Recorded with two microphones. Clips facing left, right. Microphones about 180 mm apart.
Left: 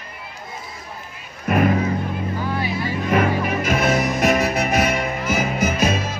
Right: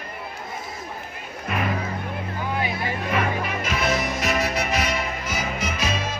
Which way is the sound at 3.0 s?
50° left (ahead or behind).